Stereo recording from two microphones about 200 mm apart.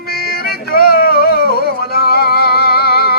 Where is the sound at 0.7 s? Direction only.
50° left (ahead or behind).